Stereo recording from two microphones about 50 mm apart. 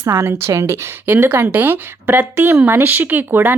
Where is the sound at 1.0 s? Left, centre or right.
Right.